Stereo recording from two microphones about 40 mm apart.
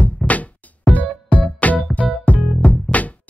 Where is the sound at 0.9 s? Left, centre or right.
Left.